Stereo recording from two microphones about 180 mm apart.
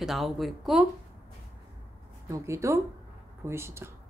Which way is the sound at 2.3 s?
15° right (ahead or behind).